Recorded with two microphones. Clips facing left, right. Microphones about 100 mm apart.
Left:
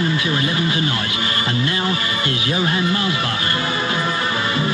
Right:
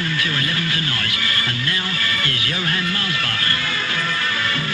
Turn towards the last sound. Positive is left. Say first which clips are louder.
# left 4 dB
turn(degrees=25)  # may be behind; listen again after turning